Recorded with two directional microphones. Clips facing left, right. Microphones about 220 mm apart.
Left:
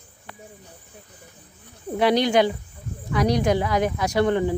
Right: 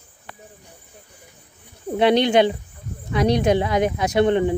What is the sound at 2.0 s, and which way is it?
Speech, 25° right (ahead or behind).